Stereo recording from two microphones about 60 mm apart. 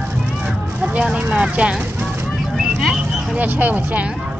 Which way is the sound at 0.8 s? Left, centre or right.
Right.